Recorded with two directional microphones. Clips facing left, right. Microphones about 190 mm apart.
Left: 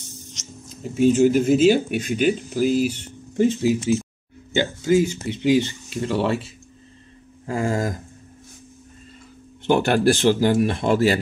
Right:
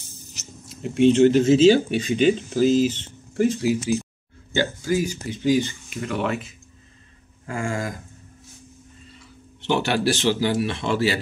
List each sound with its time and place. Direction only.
0.3 s speech: 5° right (ahead or behind)
4.6 s speech: 20° left (ahead or behind)
7.4 s a sound: 35° left (ahead or behind)
9.7 s speech: 50° left (ahead or behind)